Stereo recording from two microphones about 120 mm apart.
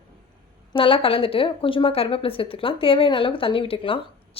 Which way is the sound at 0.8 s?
50° left (ahead or behind).